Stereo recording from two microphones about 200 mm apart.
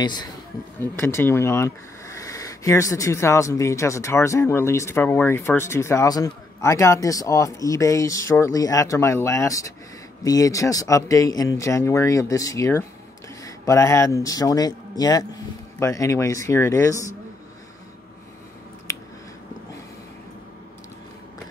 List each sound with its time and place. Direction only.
0.0 s speech: 20° left (ahead or behind)